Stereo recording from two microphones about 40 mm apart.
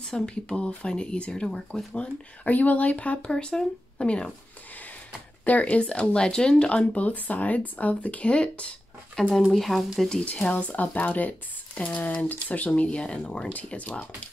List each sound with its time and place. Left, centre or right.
0.0 s speech: centre
2.4 s speech: left
3.3 s speech: left
5.4 s speech: left
5.8 s speech: left
7.1 s speech: left
9.2 s speech: centre
9.5 s speech: centre
10.5 s speech: left
11.7 s a sound: left
12.0 s speech: left
12.8 s speech: left